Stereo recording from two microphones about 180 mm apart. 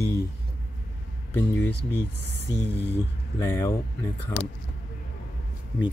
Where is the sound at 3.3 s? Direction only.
15° left (ahead or behind).